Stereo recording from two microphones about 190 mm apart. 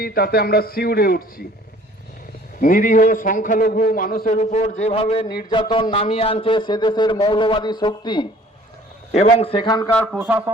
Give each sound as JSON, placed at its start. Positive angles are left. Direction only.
{"t": 0.0, "sound": "a man's voice", "side_deg": 50}
{"t": 2.6, "sound": "a man's voice", "side_deg": 45}
{"t": 9.9, "sound": "speech", "side_deg": 5}
{"t": 10.2, "sound": "speech", "side_deg": -10}